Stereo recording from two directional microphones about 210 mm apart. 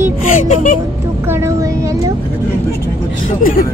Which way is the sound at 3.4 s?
45° left (ahead or behind).